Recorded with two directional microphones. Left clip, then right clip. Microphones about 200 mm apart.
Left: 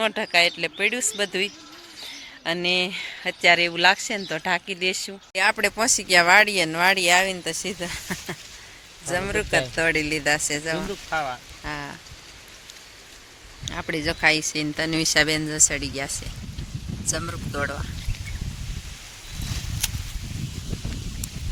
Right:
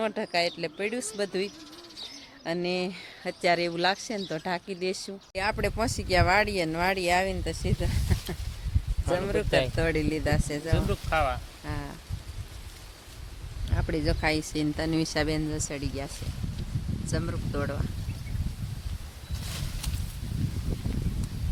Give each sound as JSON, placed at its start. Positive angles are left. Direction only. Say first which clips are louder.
{"t": 0.0, "sound": "speech", "louder": "left 7 dB", "side_deg": 0}
{"t": 11.1, "sound": "speech", "louder": "even", "side_deg": -20}
{"t": 11.6, "sound": "rain on surface", "louder": "left 6 dB", "side_deg": 0}
{"t": 13.7, "sound": "speech", "louder": "left 4 dB", "side_deg": -5}
{"t": 19.8, "sound": "a sound", "louder": "left 11 dB", "side_deg": 0}